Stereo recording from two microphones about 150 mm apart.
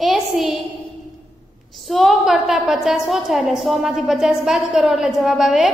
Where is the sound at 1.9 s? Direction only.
Centre (ahead or behind).